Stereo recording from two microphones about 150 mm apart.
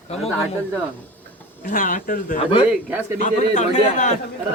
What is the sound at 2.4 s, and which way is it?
Speech, 35° left (ahead or behind).